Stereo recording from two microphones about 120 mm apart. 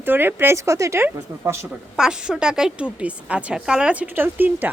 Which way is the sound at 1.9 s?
5° right (ahead or behind).